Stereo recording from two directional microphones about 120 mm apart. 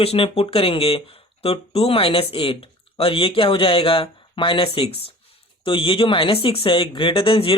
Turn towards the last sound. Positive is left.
turn(degrees=50)  # may be behind; listen again after turning